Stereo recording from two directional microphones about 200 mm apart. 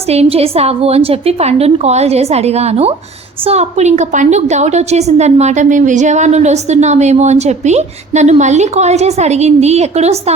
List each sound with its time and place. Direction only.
0.1 s a woman's voice: 30° right (ahead or behind)